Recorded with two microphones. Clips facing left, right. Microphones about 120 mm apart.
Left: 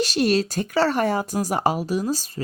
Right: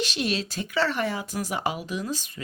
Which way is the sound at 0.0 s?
40° left (ahead or behind).